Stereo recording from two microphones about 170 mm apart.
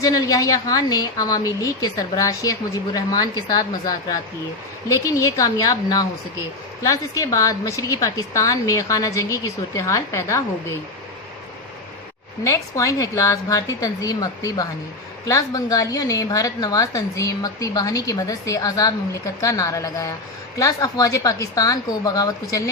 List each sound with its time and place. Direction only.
0.0 s a woman's voice: 20° left (ahead or behind)
12.5 s a woman's voice: 20° left (ahead or behind)